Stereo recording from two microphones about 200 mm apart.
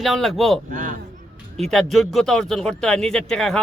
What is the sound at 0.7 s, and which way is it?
Speech, 40° right (ahead or behind).